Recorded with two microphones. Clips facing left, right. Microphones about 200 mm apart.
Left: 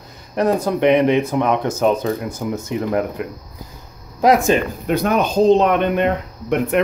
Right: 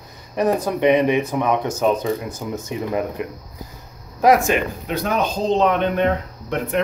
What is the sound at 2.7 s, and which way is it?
Speech, 20° right (ahead or behind).